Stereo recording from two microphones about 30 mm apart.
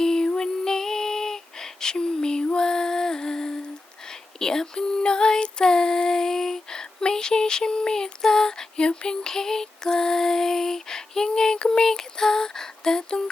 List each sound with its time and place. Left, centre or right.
0.0 s music: left
0.3 s female singing: centre
9.2 s female singing: centre